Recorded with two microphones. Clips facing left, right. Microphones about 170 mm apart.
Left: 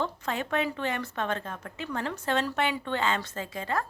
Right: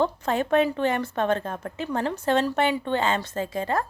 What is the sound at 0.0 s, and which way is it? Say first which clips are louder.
A woman's voice: right 7 dB; 40° right (ahead or behind).